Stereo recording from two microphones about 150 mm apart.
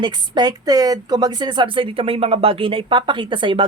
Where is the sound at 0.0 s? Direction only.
25° right (ahead or behind).